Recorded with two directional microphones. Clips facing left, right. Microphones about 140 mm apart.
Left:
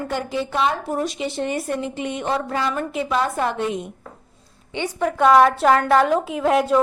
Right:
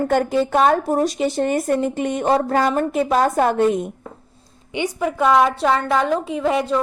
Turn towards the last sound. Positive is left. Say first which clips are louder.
# left 1 dB
turn(degrees=5)  # may be behind; listen again after turning